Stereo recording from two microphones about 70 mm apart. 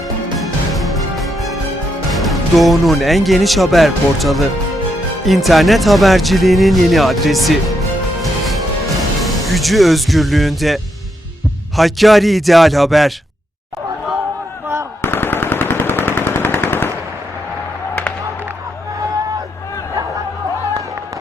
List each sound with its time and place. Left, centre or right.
0.3 s music: centre
2.0 s speech: centre
8.2 s music: centre
11.8 s speech: centre
15.0 s machine gun: left